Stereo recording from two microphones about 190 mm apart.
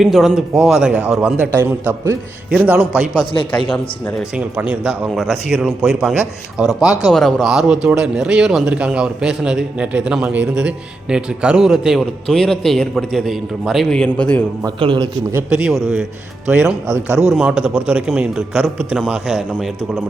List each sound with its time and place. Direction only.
0.0 s speech: centre (ahead or behind)
1.4 s speech: 10° left (ahead or behind)
1.9 s a man's voice: 5° right (ahead or behind)
6.8 s speech: 20° left (ahead or behind)
7.1 s speech: centre (ahead or behind)
14.6 s a man's voice: 25° right (ahead or behind)
15.4 s speech: 5° right (ahead or behind)